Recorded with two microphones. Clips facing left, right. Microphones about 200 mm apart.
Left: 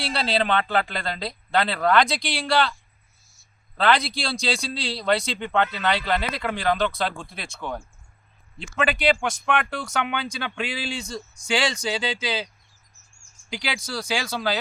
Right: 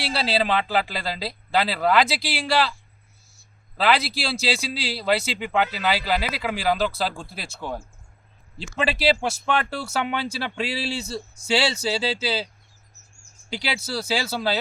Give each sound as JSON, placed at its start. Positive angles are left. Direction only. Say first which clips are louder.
{"t": 0.0, "sound": "speech", "louder": "even", "side_deg": -5}
{"t": 3.8, "sound": "speech", "louder": "even", "side_deg": -5}
{"t": 8.6, "sound": "speech", "louder": "even", "side_deg": -30}
{"t": 10.1, "sound": "speech", "louder": "right 2 dB", "side_deg": -5}
{"t": 10.4, "sound": "speech", "louder": "right 2 dB", "side_deg": -35}
{"t": 10.9, "sound": "speech", "louder": "right 2 dB", "side_deg": -5}
{"t": 11.9, "sound": "speech", "louder": "right 2 dB", "side_deg": -35}
{"t": 13.7, "sound": "speech", "louder": "right 2 dB", "side_deg": -5}
{"t": 14.3, "sound": "speech", "louder": "even", "side_deg": -30}